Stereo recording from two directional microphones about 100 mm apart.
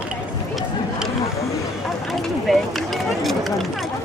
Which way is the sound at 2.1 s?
Centre (ahead or behind).